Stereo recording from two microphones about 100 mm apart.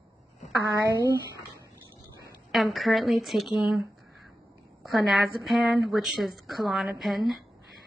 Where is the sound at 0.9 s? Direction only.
35° right (ahead or behind).